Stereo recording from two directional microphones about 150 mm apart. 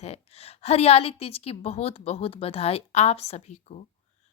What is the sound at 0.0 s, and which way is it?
A woman's voice, 45° left (ahead or behind).